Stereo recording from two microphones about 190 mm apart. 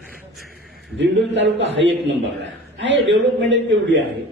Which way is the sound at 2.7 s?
70° right (ahead or behind).